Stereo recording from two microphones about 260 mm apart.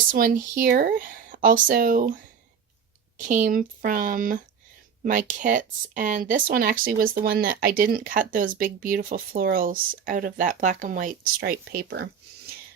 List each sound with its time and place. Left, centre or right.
0.1 s speech: right